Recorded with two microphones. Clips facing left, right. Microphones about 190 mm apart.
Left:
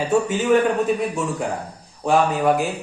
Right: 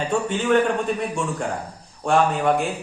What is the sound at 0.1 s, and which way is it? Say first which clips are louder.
A man's voice: left 3 dB; 5° left (ahead or behind).